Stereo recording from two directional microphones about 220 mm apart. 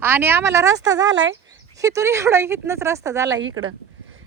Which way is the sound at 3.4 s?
65° right (ahead or behind).